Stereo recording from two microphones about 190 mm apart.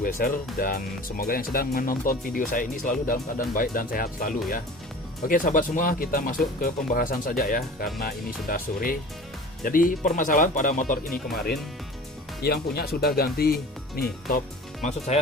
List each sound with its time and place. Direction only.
0.0 s speech: 50° left (ahead or behind)
12.4 s speech: 55° left (ahead or behind)
14.8 s speech: 35° left (ahead or behind)